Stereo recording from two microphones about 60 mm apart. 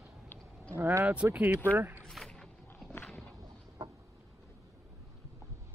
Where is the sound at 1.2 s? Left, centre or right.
Right.